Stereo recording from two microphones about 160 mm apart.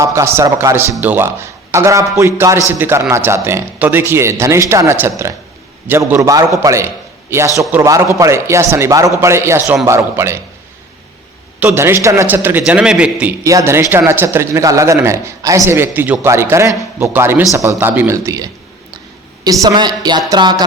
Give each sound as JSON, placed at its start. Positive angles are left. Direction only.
{"t": 0.0, "sound": "a man's voice", "side_deg": -20}
{"t": 11.6, "sound": "speech", "side_deg": -15}
{"t": 13.4, "sound": "speech", "side_deg": -20}
{"t": 19.6, "sound": "speech", "side_deg": -25}